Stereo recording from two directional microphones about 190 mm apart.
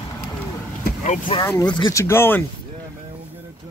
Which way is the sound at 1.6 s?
20° left (ahead or behind).